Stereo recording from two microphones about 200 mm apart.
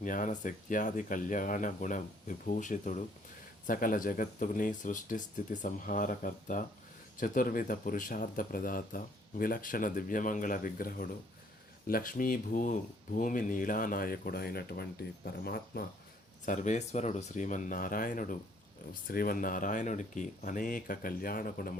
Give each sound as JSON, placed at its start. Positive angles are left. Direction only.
{"t": 0.0, "sound": "speech", "side_deg": 40}
{"t": 16.5, "sound": "speech", "side_deg": 40}